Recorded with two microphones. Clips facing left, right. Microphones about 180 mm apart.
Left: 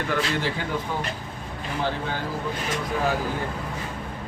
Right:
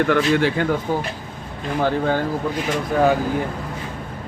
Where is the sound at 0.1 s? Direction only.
60° right (ahead or behind).